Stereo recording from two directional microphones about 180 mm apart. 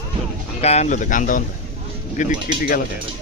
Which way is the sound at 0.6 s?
35° left (ahead or behind).